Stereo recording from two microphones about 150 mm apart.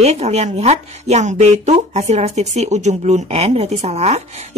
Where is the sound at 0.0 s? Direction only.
45° right (ahead or behind).